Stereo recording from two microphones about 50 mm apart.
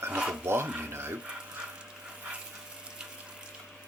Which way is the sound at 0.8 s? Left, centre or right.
Right.